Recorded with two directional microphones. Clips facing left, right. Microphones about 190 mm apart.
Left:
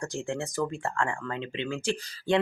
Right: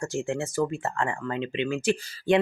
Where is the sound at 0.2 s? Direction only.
15° right (ahead or behind).